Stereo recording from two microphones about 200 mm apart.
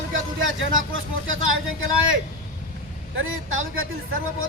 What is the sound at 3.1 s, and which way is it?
Speech, 90° right.